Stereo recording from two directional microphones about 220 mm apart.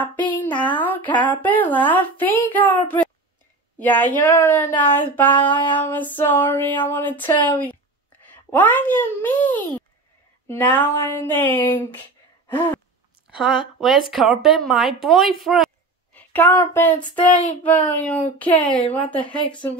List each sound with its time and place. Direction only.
0.3 s a woman's voice: 5° left (ahead or behind)
12.4 s gasp: 10° left (ahead or behind)
13.4 s a woman's voice: centre (ahead or behind)
19.2 s speech: 20° left (ahead or behind)